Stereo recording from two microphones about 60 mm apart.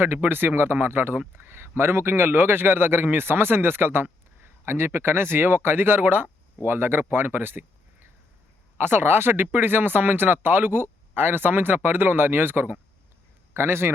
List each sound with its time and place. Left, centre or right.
0.0 s a man's voice: right